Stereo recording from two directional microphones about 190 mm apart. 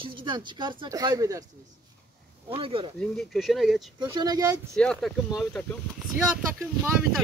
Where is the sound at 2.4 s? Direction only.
30° right (ahead or behind).